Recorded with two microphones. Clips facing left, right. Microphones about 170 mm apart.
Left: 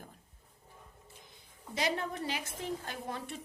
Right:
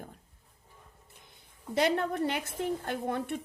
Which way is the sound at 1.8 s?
60° right (ahead or behind).